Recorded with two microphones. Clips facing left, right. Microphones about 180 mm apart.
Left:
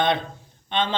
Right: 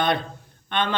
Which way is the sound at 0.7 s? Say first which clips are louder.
Even; 60° right (ahead or behind).